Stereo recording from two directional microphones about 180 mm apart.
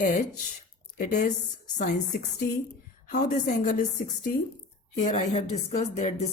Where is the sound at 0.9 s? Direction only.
45° left (ahead or behind).